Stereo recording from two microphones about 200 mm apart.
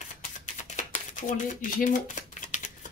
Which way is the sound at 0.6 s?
40° left (ahead or behind).